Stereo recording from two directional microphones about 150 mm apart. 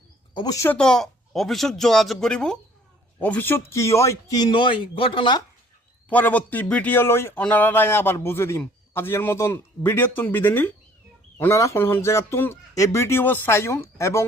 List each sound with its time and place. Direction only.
0.3 s speech: 25° left (ahead or behind)
0.7 s speech: 5° left (ahead or behind); by 5.4 s 35° left (ahead or behind)
6.1 s speech: 10° left (ahead or behind)